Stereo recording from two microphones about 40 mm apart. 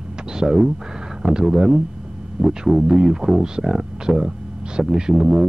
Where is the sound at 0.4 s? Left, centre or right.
Centre.